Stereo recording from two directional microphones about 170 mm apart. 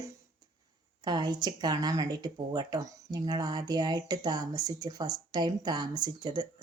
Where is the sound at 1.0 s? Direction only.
25° right (ahead or behind).